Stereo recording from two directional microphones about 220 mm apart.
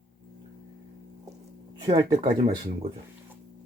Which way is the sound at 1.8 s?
20° right (ahead or behind).